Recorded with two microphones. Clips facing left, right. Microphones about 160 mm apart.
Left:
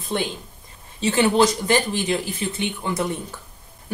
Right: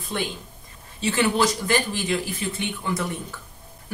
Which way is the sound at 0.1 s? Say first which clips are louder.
Left 3 dB; 25° left (ahead or behind).